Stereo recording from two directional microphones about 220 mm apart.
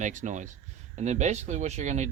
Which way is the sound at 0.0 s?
35° right (ahead or behind).